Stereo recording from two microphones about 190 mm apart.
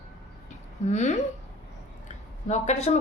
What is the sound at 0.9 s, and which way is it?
Speech, 35° left (ahead or behind).